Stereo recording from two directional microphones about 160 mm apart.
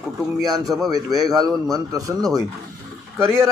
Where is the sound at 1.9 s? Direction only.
20° right (ahead or behind).